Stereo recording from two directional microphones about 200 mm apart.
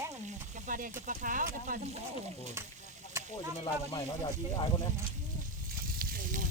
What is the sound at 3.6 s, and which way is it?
Speech, 25° left (ahead or behind).